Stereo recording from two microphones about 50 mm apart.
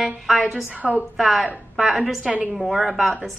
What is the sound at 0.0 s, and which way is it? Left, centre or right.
A woman's voice, centre.